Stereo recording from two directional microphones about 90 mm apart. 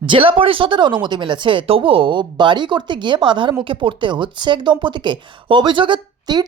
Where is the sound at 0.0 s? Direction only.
75° right (ahead or behind).